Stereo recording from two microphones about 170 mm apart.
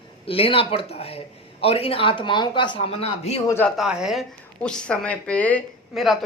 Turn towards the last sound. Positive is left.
turn(degrees=5)  # may be behind; listen again after turning